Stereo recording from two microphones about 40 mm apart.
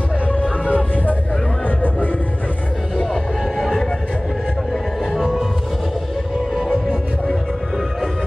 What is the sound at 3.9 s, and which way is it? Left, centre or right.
Music, centre.